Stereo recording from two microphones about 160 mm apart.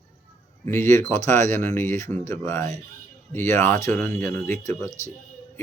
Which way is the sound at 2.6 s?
45° right (ahead or behind).